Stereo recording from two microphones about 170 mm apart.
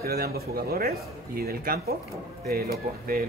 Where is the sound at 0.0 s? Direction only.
65° right (ahead or behind).